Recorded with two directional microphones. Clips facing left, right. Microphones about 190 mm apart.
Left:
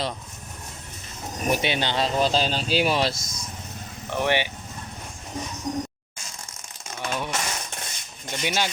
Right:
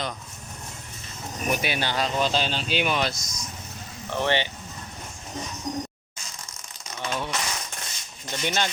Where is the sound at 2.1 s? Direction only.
35° left (ahead or behind).